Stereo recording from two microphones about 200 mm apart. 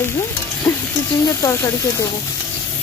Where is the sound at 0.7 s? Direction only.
15° left (ahead or behind).